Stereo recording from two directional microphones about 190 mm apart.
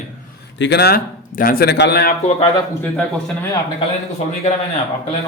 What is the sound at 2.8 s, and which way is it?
Speech, 5° left (ahead or behind).